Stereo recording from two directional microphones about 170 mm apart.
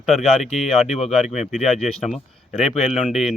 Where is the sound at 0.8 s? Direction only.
40° left (ahead or behind).